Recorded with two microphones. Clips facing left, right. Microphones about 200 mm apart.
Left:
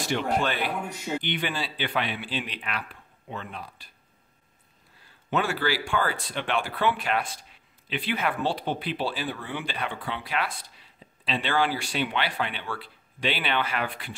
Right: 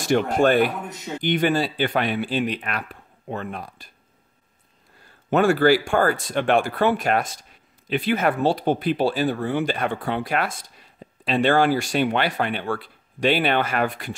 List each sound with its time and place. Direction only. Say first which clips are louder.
0.0 s speech: right 8 dB; 45° right (ahead or behind)
0.8 s a man's voice: left 1 dB; 10° left (ahead or behind)
1.2 s speech: right 10 dB; 45° right (ahead or behind)
5.3 s speech: right 10 dB; 45° right (ahead or behind)